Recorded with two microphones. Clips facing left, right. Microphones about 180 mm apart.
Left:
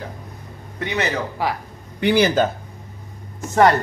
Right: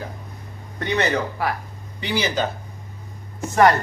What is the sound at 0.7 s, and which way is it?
Speech, 5° left (ahead or behind).